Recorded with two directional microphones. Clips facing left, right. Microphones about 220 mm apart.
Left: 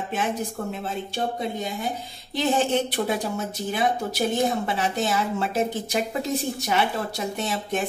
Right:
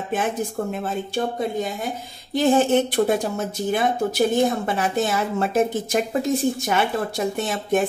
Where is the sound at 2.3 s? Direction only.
50° right (ahead or behind).